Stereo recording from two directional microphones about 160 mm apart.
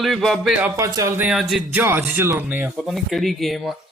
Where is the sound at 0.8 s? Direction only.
20° right (ahead or behind).